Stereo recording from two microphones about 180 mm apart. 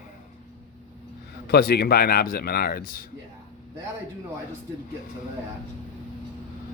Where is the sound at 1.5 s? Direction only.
60° left (ahead or behind).